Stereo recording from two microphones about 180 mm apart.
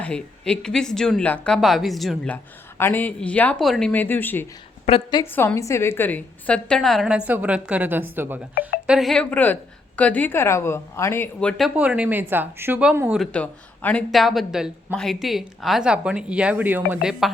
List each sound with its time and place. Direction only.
0.0 s a woman's voice: 5° left (ahead or behind)
4.9 s a woman's voice: 30° left (ahead or behind)
5.2 s a woman's voice: 10° left (ahead or behind); by 8.4 s 10° right (ahead or behind)
8.9 s a woman's voice: centre (ahead or behind)
13.3 s a woman's voice: 5° left (ahead or behind)